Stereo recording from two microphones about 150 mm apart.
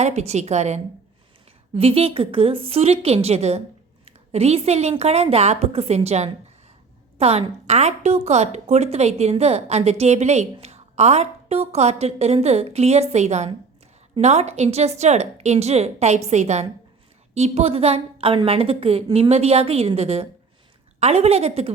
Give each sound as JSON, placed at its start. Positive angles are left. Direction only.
{"t": 0.0, "sound": "a woman's voice", "side_deg": -45}